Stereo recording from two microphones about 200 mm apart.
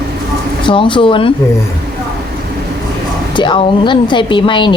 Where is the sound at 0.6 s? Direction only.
25° left (ahead or behind).